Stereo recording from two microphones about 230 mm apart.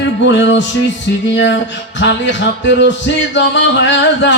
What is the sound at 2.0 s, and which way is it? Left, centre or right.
Music, left.